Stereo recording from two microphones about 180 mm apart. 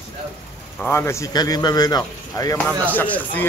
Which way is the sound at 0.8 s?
15° left (ahead or behind).